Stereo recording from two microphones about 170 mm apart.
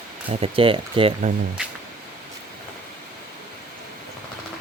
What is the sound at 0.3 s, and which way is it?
Speech, 30° right (ahead or behind).